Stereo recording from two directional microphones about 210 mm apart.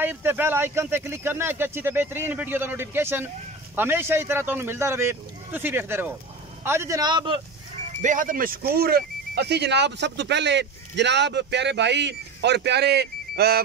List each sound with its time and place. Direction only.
0.0 s a man's voice: 10° right (ahead or behind)
8.0 s speech: 35° right (ahead or behind)